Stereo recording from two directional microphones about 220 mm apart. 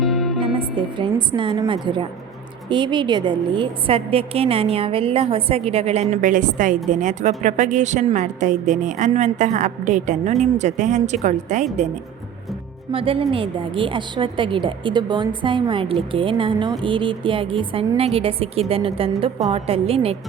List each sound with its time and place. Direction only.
0.0 s music: centre (ahead or behind)
0.5 s a woman's voice: 20° right (ahead or behind)
12.9 s a woman's voice: 25° right (ahead or behind)